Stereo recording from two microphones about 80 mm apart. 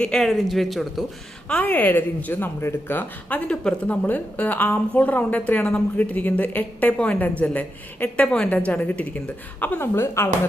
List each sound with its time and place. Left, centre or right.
0.0 s speech: centre
1.5 s speech: centre